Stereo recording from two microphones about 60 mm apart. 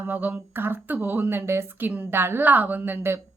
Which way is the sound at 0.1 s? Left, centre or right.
Right.